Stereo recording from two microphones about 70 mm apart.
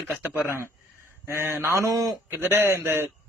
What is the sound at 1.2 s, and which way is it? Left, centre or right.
Speech, right.